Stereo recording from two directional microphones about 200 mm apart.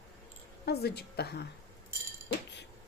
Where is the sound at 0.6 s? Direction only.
55° left (ahead or behind).